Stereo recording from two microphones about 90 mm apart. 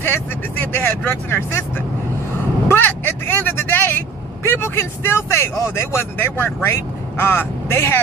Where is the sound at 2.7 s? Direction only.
20° left (ahead or behind).